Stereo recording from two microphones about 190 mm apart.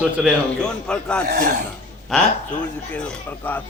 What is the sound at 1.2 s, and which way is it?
Speech, 55° right (ahead or behind).